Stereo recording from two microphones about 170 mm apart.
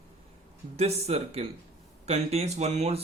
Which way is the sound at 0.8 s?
40° right (ahead or behind).